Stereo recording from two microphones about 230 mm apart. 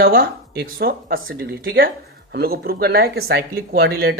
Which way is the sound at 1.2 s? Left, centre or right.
Right.